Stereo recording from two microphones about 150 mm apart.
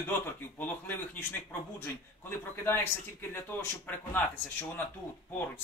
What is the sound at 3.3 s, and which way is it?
A man's voice, 10° left (ahead or behind).